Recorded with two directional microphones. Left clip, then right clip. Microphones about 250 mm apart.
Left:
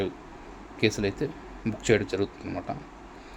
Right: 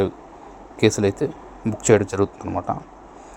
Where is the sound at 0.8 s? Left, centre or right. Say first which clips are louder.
Right 8 dB; centre.